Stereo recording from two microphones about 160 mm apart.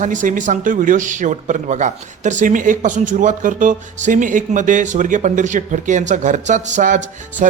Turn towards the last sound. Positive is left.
turn(degrees=-50)  # may be behind; listen again after turning